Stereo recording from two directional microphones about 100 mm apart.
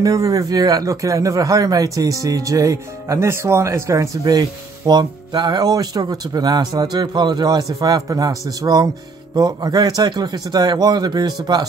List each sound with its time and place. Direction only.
0.0 s speech: 35° right (ahead or behind)